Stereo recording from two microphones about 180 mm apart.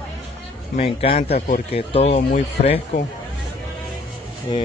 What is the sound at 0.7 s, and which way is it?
Speech, 30° left (ahead or behind).